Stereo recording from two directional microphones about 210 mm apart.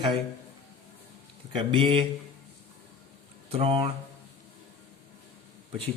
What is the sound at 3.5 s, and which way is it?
Speech, 25° right (ahead or behind).